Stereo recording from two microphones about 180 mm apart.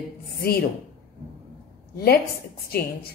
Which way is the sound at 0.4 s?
60° left (ahead or behind).